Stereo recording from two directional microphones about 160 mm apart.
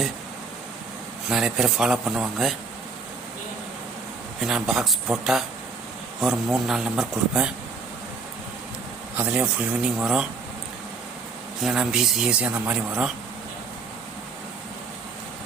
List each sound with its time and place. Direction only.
1.3 s speech: centre (ahead or behind)
4.4 s speech: centre (ahead or behind)
9.1 s speech: 10° right (ahead or behind)
11.6 s speech: 5° right (ahead or behind)